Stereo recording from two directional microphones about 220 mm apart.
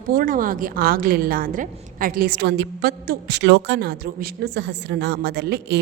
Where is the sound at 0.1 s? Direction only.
40° right (ahead or behind).